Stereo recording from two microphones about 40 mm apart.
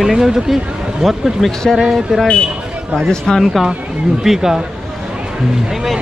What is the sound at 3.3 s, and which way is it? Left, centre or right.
Speech, centre.